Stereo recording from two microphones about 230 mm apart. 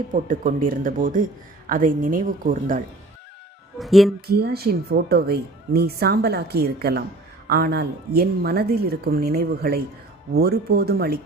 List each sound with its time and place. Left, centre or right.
0.1 s speech: right
3.8 s speech: centre
4.3 s speech: right